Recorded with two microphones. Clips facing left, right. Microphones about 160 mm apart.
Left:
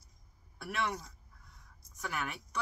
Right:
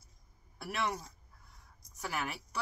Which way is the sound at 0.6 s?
Centre (ahead or behind).